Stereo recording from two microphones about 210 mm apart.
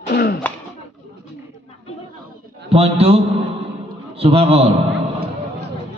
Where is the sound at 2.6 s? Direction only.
30° right (ahead or behind).